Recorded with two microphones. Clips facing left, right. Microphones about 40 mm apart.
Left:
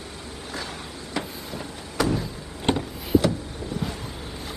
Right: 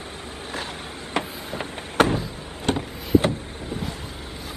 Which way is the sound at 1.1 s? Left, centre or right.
Right.